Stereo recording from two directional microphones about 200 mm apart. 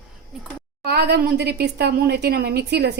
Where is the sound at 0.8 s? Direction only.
55° right (ahead or behind).